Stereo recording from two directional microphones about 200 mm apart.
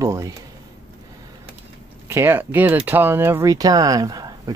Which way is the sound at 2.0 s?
10° right (ahead or behind).